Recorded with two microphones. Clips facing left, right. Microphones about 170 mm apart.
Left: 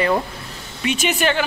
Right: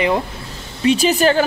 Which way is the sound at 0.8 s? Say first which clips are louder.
Right 6 dB; 35° right (ahead or behind).